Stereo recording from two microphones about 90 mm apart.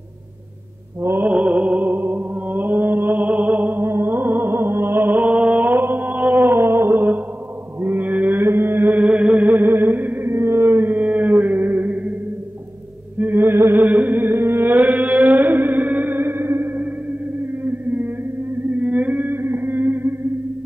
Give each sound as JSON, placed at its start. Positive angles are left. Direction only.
{"t": 1.0, "sound": "mantra", "side_deg": -20}
{"t": 7.8, "sound": "chant", "side_deg": -20}
{"t": 13.2, "sound": "music", "side_deg": -25}